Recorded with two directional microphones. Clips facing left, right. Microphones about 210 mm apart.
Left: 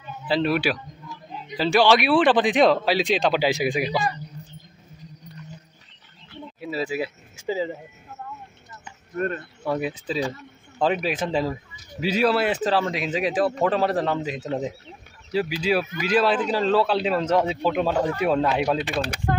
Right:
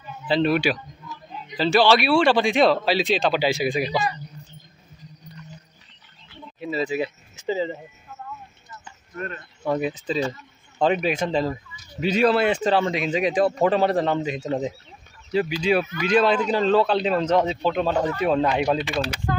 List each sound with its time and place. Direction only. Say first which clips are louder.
0.3 s a man's voice: right 2 dB; 5° left (ahead or behind)
6.6 s speech: right 2 dB; 5° left (ahead or behind)
9.1 s speech: left 7 dB; 40° left (ahead or behind)
9.4 s a man's voice: right 2 dB; 5° left (ahead or behind)